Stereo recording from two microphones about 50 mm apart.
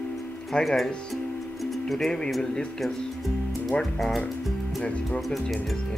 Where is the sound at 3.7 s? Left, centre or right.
Centre.